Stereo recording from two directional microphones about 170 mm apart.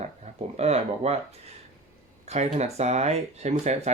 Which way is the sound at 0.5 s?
40° right (ahead or behind).